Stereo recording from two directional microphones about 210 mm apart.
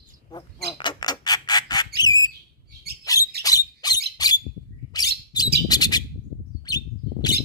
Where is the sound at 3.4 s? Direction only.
20° left (ahead or behind).